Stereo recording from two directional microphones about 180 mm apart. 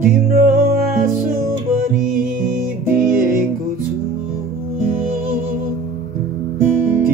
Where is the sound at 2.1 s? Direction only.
50° right (ahead or behind).